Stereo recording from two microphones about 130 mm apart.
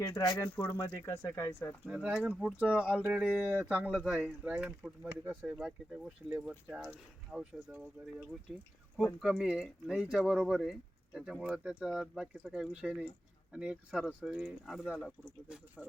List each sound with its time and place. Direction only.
0.0 s speech: 30° left (ahead or behind)
0.4 s speech: 15° left (ahead or behind)
1.9 s speech: 5° right (ahead or behind)
9.2 s speech: 5° right (ahead or behind)